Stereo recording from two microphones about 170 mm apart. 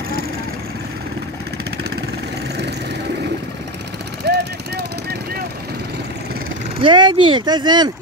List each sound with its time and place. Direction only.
4.2 s vehicle: 75° right (ahead or behind)
6.8 s speech: 25° right (ahead or behind)